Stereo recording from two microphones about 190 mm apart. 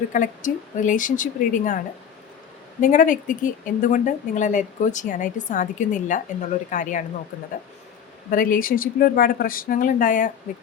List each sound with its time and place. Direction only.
0.1 s speech: 40° left (ahead or behind)
2.8 s speech: 45° left (ahead or behind)
8.3 s speech: 45° left (ahead or behind)